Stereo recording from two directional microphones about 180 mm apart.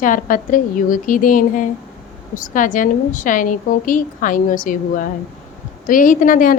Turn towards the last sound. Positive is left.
turn(degrees=50)  # may be behind; listen again after turning